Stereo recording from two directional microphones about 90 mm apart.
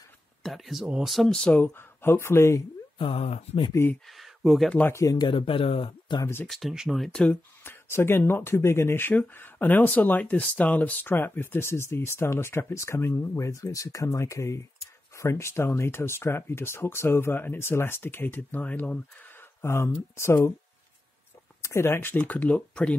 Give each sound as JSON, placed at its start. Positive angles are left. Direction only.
{"t": 0.4, "sound": "speech", "side_deg": 0}
{"t": 1.5, "sound": "speech", "side_deg": 20}
{"t": 3.0, "sound": "speech", "side_deg": 80}
{"t": 4.1, "sound": "a sound", "side_deg": 0}
{"t": 4.6, "sound": "speech", "side_deg": 15}
{"t": 5.2, "sound": "speech", "side_deg": 70}
{"t": 6.4, "sound": "speech", "side_deg": 0}
{"t": 7.1, "sound": "speech", "side_deg": 10}
{"t": 7.6, "sound": "speech", "side_deg": 25}
{"t": 21.6, "sound": "speech", "side_deg": 30}